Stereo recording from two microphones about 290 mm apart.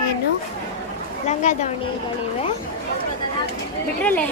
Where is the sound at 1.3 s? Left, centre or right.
Left.